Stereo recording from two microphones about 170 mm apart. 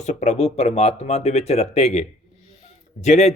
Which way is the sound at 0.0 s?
40° left (ahead or behind).